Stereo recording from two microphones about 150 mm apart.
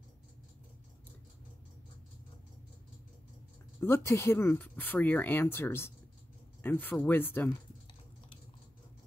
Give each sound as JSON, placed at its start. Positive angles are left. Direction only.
{"t": 3.8, "sound": "speech", "side_deg": 15}